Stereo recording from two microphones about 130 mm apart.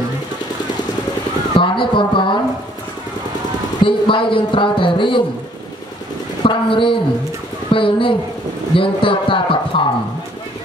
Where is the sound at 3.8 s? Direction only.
40° left (ahead or behind).